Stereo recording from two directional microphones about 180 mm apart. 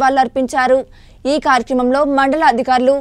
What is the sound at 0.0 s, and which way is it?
A woman's voice, centre (ahead or behind).